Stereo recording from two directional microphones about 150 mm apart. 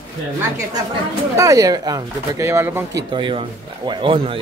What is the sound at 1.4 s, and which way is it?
Speech, 20° right (ahead or behind).